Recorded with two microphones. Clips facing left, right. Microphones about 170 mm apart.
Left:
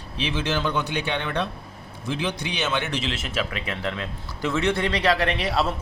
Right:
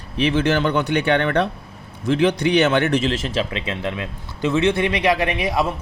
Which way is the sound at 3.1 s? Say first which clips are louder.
Right 6 dB; 35° right (ahead or behind).